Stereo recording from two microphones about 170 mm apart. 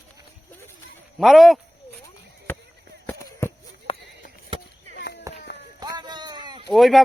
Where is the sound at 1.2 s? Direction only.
Centre (ahead or behind).